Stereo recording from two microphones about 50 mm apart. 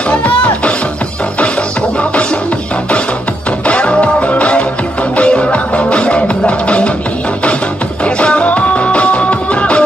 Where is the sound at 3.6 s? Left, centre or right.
Left.